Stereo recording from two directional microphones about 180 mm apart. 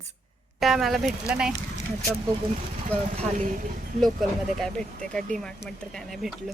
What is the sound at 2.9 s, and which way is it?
Speech, 45° right (ahead or behind).